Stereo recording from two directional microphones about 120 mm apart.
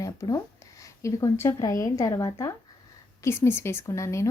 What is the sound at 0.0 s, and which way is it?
Speech, 30° left (ahead or behind).